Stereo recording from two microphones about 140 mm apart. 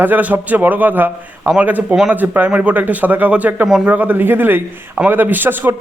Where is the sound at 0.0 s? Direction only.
10° right (ahead or behind).